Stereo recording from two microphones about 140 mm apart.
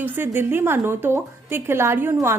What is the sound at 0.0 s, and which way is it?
A woman's voice, 15° right (ahead or behind).